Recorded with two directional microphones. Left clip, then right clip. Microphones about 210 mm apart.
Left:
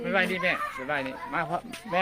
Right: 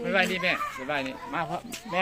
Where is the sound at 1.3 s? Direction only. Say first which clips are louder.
Left 1 dB; 20° left (ahead or behind).